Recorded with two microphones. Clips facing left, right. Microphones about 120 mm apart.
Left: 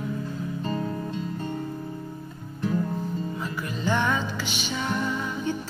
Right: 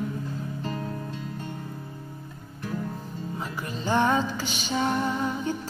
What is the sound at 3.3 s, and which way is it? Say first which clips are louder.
Music: left 2 dB; 30° right (ahead or behind).